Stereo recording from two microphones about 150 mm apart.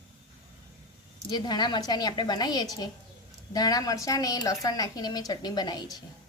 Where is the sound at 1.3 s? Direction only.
30° left (ahead or behind).